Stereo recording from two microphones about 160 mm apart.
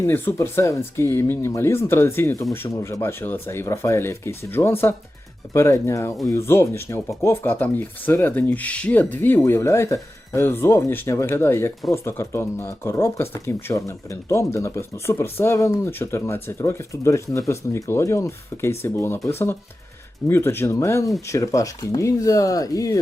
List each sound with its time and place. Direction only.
0.0 s speech: 15° left (ahead or behind)